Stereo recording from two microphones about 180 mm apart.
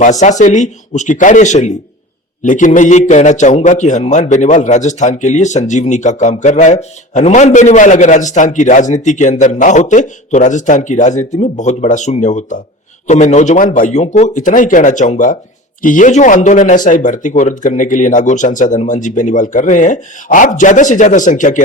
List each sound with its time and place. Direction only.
0.0 s a man's voice: 40° left (ahead or behind)